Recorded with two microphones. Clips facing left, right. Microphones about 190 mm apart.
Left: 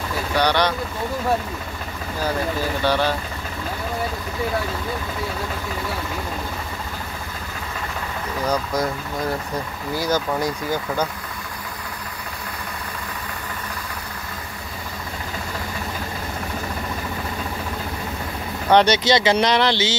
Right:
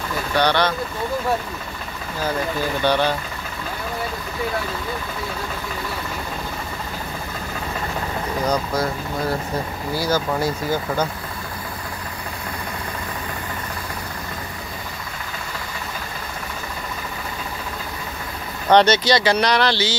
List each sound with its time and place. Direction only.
0.4 s speech: 15° left (ahead or behind)
2.8 s speech: 5° left (ahead or behind)
9.9 s speech: 20° left (ahead or behind)
10.4 s speech: 10° right (ahead or behind)
18.7 s speech: 10° left (ahead or behind)
19.0 s speech: 20° left (ahead or behind)